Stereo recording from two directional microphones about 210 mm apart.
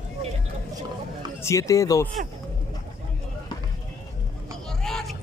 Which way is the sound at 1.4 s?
15° left (ahead or behind).